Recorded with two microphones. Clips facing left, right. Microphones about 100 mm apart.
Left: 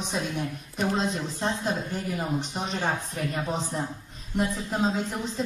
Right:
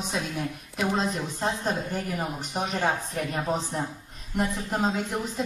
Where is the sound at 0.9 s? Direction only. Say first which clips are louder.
Even; 45° right (ahead or behind).